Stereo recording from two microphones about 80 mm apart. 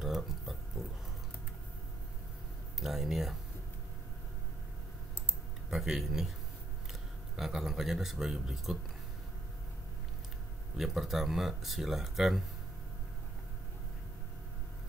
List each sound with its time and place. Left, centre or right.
0.0 s pig: centre
2.8 s speech: centre
5.7 s speech: centre
10.8 s speech: centre